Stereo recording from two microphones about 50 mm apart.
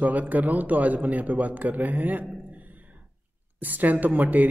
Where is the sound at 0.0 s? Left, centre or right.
Right.